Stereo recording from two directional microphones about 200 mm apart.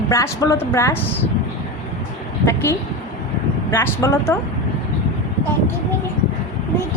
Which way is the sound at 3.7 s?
15° left (ahead or behind).